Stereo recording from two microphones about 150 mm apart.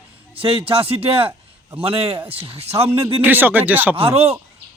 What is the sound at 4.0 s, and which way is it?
Speech, 40° right (ahead or behind).